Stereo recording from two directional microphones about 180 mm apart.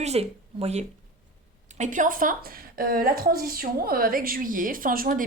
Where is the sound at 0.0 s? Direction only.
35° right (ahead or behind).